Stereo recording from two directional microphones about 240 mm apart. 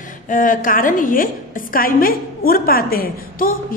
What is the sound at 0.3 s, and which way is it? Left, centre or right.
A woman's voice, left.